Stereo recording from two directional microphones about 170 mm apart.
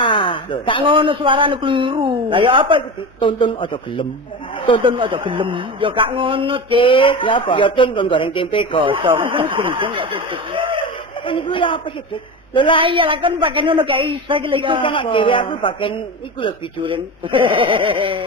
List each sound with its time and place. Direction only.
0.0 s a sound: 30° left (ahead or behind)
0.8 s a man's voice: 30° right (ahead or behind)
3.2 s a woman's voice: 30° left (ahead or behind)
4.8 s a man's voice: 30° right (ahead or behind)
6.7 s a man's voice: 30° left (ahead or behind)
8.8 s a man's voice: 30° right (ahead or behind)
11.3 s a man's voice: 30° left (ahead or behind)
12.8 s a man's voice: 30° right (ahead or behind)
14.8 s a woman's voice: 30° left (ahead or behind)
16.8 s a man's voice: 30° right (ahead or behind)